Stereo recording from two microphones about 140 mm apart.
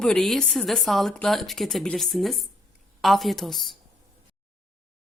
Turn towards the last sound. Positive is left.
turn(degrees=0)  # may be behind; listen again after turning